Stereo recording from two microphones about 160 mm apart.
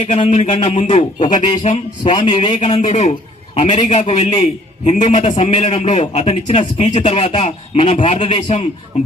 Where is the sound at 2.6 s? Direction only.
40° left (ahead or behind).